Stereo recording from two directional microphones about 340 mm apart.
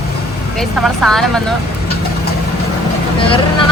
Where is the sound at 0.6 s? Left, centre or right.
Centre.